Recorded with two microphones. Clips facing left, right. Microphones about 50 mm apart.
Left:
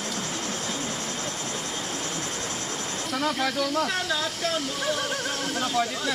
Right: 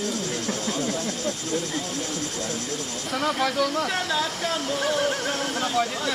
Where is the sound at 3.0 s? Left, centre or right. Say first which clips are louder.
Right 2 dB; centre.